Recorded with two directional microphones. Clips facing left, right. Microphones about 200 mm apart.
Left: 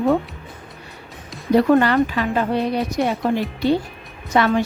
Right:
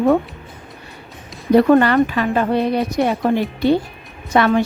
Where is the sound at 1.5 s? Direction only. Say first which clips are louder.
Right 3 dB; 55° right (ahead or behind).